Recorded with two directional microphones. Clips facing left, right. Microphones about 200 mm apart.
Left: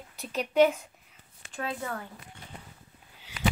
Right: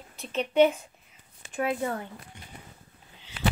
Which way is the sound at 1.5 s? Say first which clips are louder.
Right 6 dB; 20° right (ahead or behind).